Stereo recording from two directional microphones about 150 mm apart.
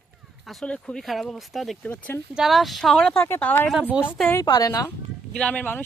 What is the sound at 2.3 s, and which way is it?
A woman's voice, centre (ahead or behind).